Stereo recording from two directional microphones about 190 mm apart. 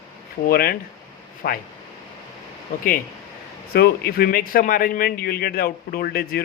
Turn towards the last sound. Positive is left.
turn(degrees=55)  # may be behind; listen again after turning